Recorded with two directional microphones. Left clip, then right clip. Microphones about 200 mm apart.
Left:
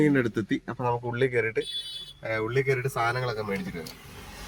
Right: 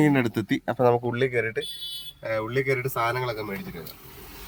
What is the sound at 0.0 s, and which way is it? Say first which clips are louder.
Speech: right 1 dB; 35° right (ahead or behind).